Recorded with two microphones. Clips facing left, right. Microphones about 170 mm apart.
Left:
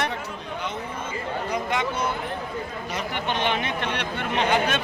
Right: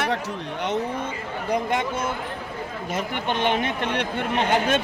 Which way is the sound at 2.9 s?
50° right (ahead or behind).